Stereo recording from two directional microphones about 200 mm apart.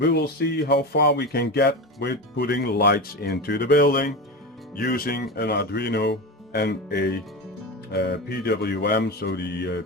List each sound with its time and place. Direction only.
0.0 s speech: 55° left (ahead or behind)